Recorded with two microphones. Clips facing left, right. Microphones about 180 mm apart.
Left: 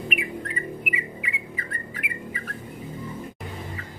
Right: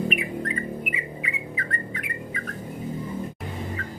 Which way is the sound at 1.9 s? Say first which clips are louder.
Right 1 dB; 5° left (ahead or behind).